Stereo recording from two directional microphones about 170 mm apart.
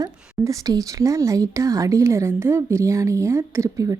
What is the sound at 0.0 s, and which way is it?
A woman's voice, 20° right (ahead or behind).